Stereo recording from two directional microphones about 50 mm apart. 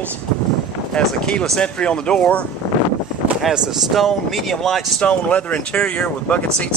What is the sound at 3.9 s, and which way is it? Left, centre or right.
Speech, centre.